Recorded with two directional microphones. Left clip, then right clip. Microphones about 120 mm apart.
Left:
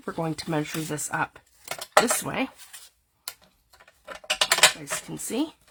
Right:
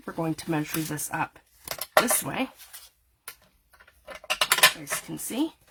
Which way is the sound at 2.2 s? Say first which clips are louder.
Left 2 dB; 35° left (ahead or behind).